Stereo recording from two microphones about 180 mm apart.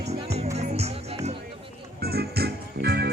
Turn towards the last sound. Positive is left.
turn(degrees=-65)  # may be behind; listen again after turning